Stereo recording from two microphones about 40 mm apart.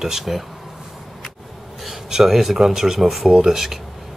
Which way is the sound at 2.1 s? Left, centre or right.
Centre.